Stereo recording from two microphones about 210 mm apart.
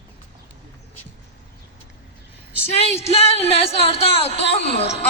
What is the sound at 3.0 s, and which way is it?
Music, 30° left (ahead or behind).